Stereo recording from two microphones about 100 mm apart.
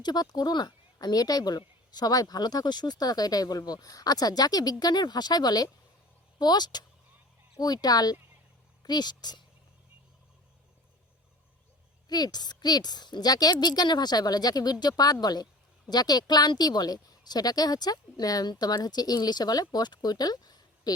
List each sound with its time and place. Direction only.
0.0 s a woman's voice: 45° left (ahead or behind)
12.0 s a woman's voice: 40° left (ahead or behind)